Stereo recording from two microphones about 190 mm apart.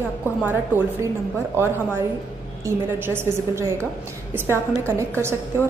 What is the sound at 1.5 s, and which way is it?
A woman's voice, 10° right (ahead or behind).